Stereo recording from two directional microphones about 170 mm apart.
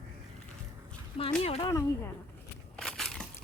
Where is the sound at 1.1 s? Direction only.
35° left (ahead or behind).